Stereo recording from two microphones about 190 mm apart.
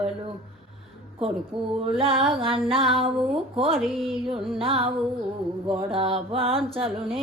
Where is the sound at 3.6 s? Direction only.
30° right (ahead or behind).